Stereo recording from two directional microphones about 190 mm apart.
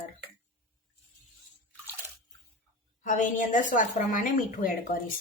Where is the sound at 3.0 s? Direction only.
40° left (ahead or behind).